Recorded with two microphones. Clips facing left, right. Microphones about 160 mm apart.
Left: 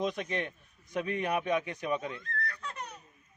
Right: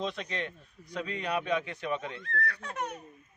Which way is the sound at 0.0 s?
15° left (ahead or behind).